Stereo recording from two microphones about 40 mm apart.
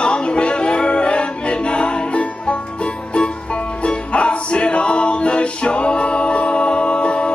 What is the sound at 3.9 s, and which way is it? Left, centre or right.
Music, left.